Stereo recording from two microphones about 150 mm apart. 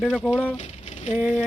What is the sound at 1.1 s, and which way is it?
Speech, 10° right (ahead or behind).